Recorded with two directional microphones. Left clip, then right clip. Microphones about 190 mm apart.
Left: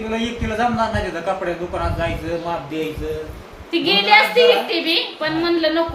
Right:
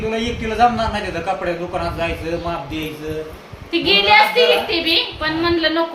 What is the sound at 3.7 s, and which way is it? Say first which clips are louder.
A woman's voice: right 1 dB; centre (ahead or behind).